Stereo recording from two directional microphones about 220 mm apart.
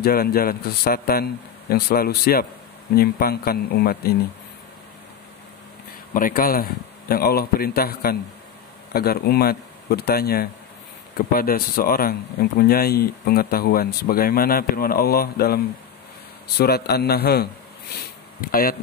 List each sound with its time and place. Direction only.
0.0 s speech: 45° left (ahead or behind)
6.1 s speech: 40° left (ahead or behind)